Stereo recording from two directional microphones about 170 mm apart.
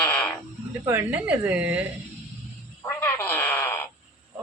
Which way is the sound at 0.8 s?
15° right (ahead or behind).